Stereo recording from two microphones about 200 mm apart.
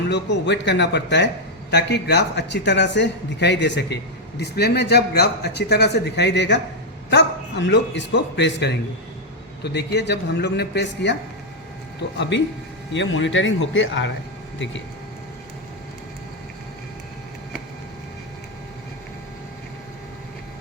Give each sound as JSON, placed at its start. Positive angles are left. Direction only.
{"t": 0.1, "sound": "a man's voice", "side_deg": 60}